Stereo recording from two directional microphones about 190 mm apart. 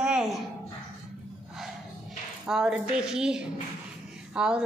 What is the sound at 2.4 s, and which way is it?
A woman's voice, 5° right (ahead or behind).